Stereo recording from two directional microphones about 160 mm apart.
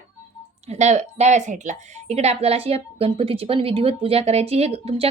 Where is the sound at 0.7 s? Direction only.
45° right (ahead or behind).